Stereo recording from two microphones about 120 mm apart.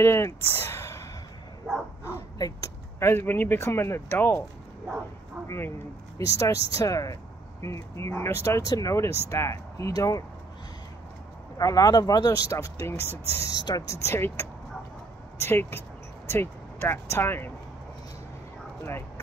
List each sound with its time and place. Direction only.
0.0 s a sound: 20° left (ahead or behind)
2.0 s speech: 25° left (ahead or behind)
6.1 s speech: 25° left (ahead or behind)
11.5 s speech: 30° left (ahead or behind)
13.6 s speech: 30° left (ahead or behind)